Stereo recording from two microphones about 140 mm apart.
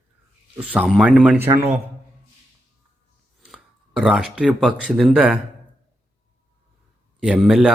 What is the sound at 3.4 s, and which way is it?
Speech, 5° right (ahead or behind).